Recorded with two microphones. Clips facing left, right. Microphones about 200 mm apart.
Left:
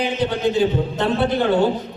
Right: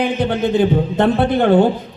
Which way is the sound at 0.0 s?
55° right (ahead or behind).